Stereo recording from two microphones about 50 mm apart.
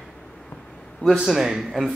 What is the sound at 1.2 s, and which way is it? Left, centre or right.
Speech, centre.